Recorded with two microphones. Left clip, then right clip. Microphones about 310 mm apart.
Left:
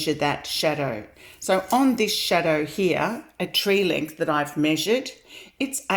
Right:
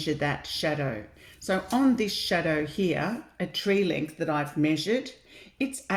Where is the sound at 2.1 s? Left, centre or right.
Left.